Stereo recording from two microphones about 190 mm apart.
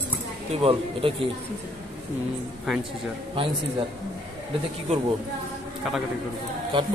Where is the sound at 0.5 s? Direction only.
30° right (ahead or behind).